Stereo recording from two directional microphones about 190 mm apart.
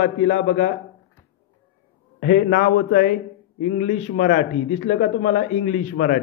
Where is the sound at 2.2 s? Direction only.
50° left (ahead or behind).